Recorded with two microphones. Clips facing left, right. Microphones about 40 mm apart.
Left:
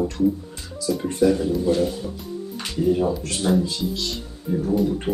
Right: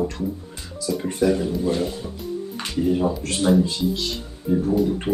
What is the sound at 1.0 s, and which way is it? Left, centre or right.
Speech, centre.